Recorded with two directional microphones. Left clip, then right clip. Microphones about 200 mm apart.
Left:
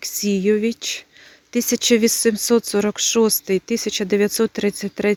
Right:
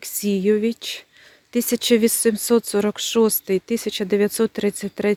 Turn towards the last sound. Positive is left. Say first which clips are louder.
# left 1 dB
turn(degrees=0)  # may be behind; listen again after turning